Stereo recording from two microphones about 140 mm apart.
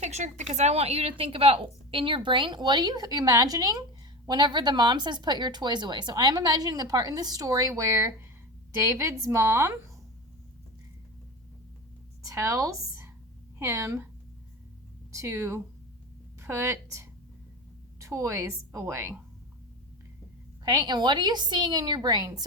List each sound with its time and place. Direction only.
0.0 s a woman's voice: 55° right (ahead or behind); by 9.7 s 20° right (ahead or behind)
12.2 s speech: 25° right (ahead or behind)
15.1 s a woman's voice: 20° right (ahead or behind)
20.7 s a woman's voice: 30° right (ahead or behind)